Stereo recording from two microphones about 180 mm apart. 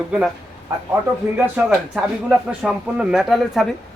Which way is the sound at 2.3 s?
5° right (ahead or behind).